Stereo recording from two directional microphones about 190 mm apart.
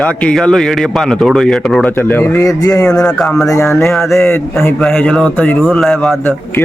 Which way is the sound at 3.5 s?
15° left (ahead or behind).